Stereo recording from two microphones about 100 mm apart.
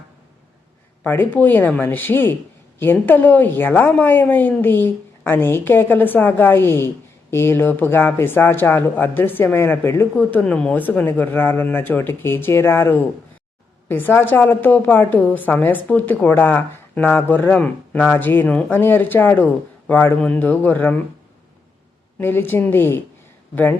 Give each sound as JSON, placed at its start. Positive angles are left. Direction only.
{"t": 1.0, "sound": "a woman's voice", "side_deg": 20}
{"t": 22.2, "sound": "a woman's voice", "side_deg": 20}